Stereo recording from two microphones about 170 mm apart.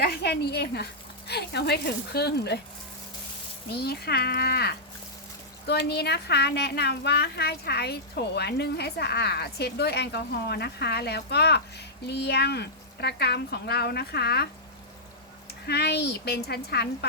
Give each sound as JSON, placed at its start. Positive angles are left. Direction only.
{"t": 0.0, "sound": "a woman's voice", "side_deg": 65}
{"t": 3.7, "sound": "a woman's voice", "side_deg": 70}
{"t": 15.6, "sound": "a woman's voice", "side_deg": 75}